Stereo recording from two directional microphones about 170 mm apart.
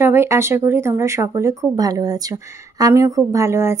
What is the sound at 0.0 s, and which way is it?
A woman's voice, 15° right (ahead or behind).